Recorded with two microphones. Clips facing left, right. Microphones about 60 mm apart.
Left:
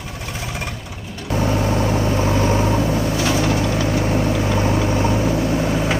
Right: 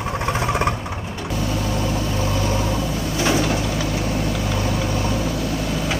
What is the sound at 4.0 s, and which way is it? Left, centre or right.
Vehicle, left.